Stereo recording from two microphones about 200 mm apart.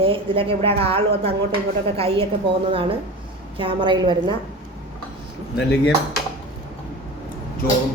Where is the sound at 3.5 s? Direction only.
25° right (ahead or behind).